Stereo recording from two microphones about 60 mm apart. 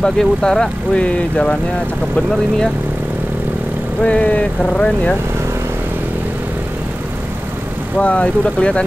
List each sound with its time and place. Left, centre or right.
0.0 s speech: centre
4.0 s speech: left
8.0 s speech: left